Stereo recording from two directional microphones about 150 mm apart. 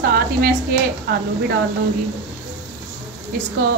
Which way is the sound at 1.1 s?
90° right.